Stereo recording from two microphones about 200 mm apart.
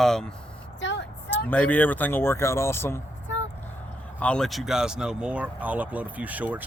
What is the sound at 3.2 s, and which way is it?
Vehicle, 70° left (ahead or behind).